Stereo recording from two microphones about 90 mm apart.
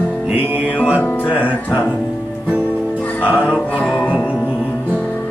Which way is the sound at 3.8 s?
15° left (ahead or behind).